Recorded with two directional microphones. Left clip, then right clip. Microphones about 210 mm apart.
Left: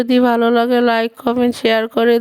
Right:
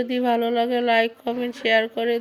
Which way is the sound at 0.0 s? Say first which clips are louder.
Left 8 dB; 50° left (ahead or behind).